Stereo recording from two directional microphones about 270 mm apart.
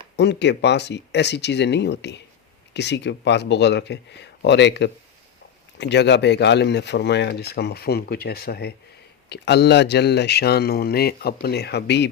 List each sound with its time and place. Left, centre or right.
0.2 s speech: left